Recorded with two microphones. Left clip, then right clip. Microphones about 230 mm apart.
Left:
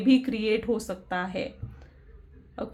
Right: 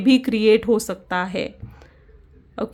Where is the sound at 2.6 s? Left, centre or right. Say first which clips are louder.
Right 8 dB; right.